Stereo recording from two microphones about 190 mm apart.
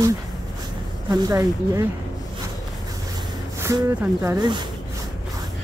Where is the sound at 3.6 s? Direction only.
15° right (ahead or behind).